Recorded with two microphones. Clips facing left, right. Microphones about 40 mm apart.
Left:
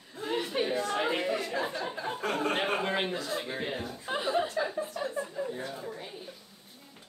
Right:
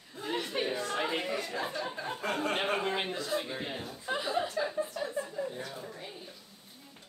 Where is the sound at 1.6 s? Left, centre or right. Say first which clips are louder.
Left 2 dB; left.